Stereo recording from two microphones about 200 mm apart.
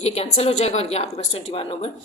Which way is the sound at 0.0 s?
30° left (ahead or behind).